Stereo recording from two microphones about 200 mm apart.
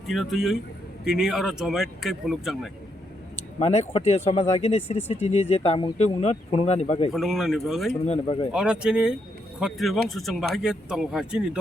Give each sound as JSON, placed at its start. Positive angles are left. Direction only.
{"t": 0.1, "sound": "a man's voice", "side_deg": 0}
{"t": 3.6, "sound": "speech", "side_deg": 30}
{"t": 7.1, "sound": "a man's voice", "side_deg": 0}
{"t": 8.0, "sound": "speech", "side_deg": 30}
{"t": 8.5, "sound": "a man's voice", "side_deg": -5}